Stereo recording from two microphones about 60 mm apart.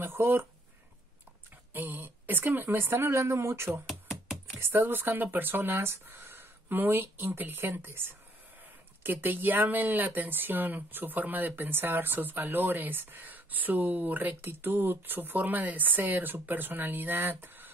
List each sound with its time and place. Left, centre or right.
0.0 s speech: right
1.7 s a sound: right
2.5 s speech: right
2.8 s speech: right
3.8 s music: centre
4.6 s speech: right